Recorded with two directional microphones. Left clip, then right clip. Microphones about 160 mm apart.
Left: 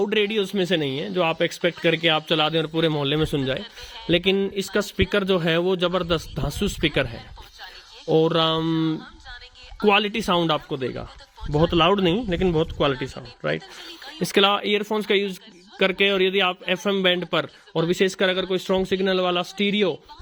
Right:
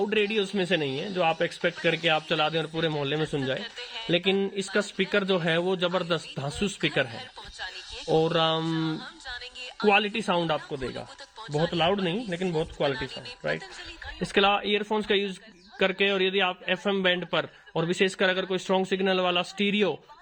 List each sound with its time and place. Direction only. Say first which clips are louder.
0.0 s a man's voice: left 4 dB; 40° left (ahead or behind)
3.6 s speech: right 1 dB; 10° right (ahead or behind)
4.1 s a man's voice: left 5 dB; 40° left (ahead or behind)
9.8 s a man's voice: left 3 dB; 40° left (ahead or behind)
11.6 s speech: left 7 dB; 60° left (ahead or behind)
14.2 s a man's voice: left 4 dB; 45° left (ahead or behind); by 20.0 s 25° left (ahead or behind)